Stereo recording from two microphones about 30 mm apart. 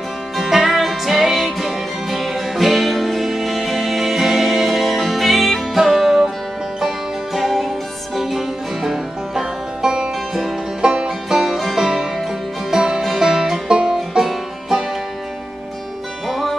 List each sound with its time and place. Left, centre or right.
0.5 s music: centre
7.3 s music: centre; by 11.1 s right
11.2 s music: centre
12.7 s music: right
13.7 s music: right
16.3 s music: centre